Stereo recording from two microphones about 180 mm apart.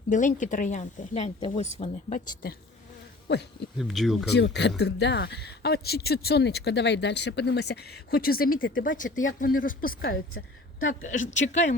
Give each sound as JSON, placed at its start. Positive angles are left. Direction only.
{"t": 0.1, "sound": "speech", "side_deg": 45}
{"t": 3.3, "sound": "speech", "side_deg": 70}
{"t": 3.8, "sound": "speech", "side_deg": 0}
{"t": 4.3, "sound": "speech", "side_deg": 70}
{"t": 8.5, "sound": "speech", "side_deg": 90}
{"t": 9.0, "sound": "speech", "side_deg": 45}
{"t": 10.4, "sound": "speech", "side_deg": 90}
{"t": 11.0, "sound": "speech", "side_deg": 45}